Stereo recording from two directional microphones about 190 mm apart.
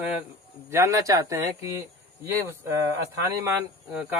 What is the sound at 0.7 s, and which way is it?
Speech, 15° right (ahead or behind).